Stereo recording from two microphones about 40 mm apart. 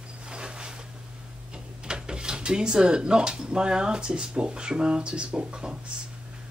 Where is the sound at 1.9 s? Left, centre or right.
Right.